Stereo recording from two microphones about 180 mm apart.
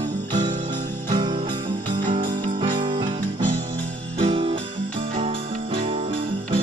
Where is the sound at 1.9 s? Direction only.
45° right (ahead or behind).